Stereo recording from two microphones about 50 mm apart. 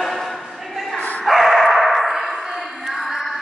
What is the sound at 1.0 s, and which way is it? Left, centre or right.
Bow-wow, left.